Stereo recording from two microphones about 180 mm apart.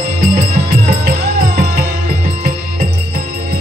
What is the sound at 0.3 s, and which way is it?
Music, 35° right (ahead or behind).